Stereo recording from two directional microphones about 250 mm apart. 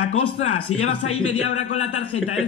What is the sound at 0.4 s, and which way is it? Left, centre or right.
Speech, left.